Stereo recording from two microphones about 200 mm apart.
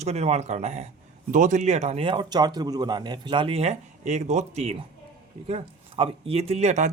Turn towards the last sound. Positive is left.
turn(degrees=-35)  # may be behind; listen again after turning